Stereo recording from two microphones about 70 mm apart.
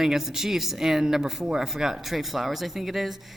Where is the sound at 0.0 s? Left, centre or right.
Centre.